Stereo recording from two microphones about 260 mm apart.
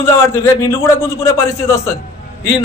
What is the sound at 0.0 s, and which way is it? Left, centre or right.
A man's voice, centre.